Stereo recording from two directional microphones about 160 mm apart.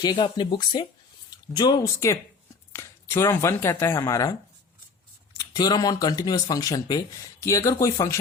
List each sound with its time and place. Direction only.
0.0 s speech: 30° left (ahead or behind)
5.4 s speech: 25° left (ahead or behind)